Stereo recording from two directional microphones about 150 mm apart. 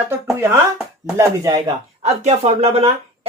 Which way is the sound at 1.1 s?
25° right (ahead or behind).